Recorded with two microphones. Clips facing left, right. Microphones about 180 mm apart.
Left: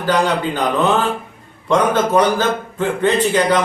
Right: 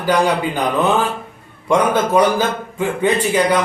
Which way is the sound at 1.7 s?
10° right (ahead or behind).